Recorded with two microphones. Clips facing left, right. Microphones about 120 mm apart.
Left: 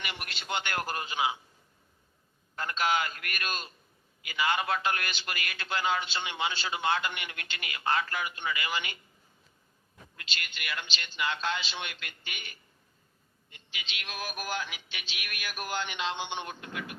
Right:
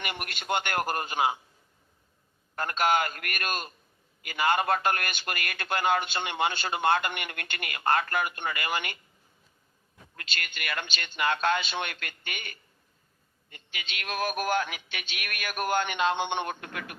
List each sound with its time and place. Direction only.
0.0 s a man's voice: 50° right (ahead or behind)
2.6 s a man's voice: 50° right (ahead or behind)
10.2 s speech: 55° right (ahead or behind)